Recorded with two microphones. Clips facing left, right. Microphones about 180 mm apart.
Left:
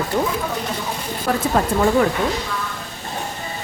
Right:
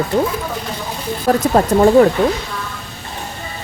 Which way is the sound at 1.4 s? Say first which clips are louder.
Right 6 dB; 40° right (ahead or behind).